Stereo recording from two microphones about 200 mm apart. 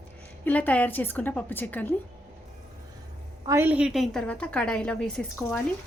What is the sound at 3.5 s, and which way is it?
A woman's voice, 10° right (ahead or behind).